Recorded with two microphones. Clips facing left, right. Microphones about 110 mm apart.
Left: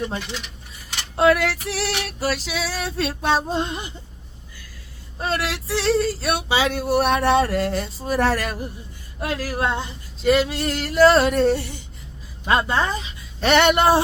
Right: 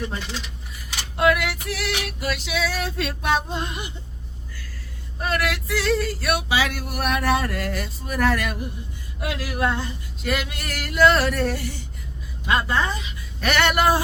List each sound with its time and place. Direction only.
1.1 s female singing: 35° left (ahead or behind)
5.2 s male singing: 30° left (ahead or behind)
9.2 s female singing: 40° left (ahead or behind)
9.6 s male singing: 25° left (ahead or behind)
10.9 s female singing: 35° left (ahead or behind)
11.2 s male singing: 20° left (ahead or behind)